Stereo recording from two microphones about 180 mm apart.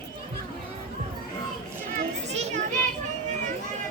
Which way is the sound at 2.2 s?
40° right (ahead or behind).